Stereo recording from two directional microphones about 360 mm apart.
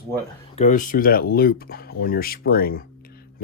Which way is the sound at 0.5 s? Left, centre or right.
Left.